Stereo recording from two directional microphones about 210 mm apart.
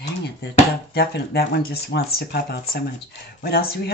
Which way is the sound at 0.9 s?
50° left (ahead or behind).